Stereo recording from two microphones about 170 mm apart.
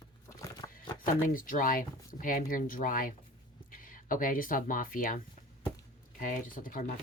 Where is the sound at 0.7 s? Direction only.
55° left (ahead or behind).